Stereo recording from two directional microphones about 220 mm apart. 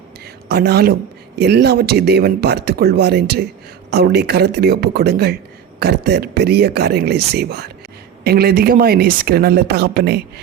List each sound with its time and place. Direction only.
0.4 s speech: 45° right (ahead or behind)